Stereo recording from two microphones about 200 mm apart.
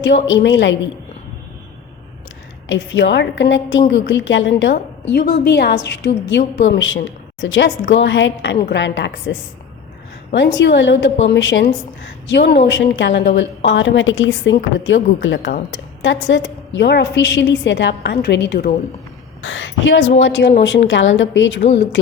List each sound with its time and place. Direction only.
0.3 s a woman's voice: 65° left (ahead or behind)
2.6 s a woman's voice: 65° left (ahead or behind)
10.3 s a woman's voice: 65° left (ahead or behind)
19.4 s a woman's voice: 75° left (ahead or behind)